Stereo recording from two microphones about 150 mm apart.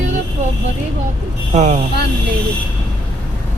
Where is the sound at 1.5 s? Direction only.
50° right (ahead or behind).